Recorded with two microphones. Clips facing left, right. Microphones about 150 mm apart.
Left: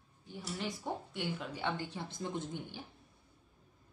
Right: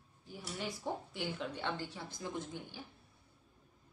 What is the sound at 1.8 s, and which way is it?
Speech, 20° left (ahead or behind).